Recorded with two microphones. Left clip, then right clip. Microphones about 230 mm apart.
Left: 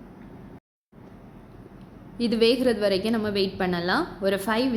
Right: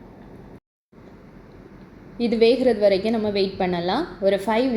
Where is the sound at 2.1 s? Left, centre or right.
Centre.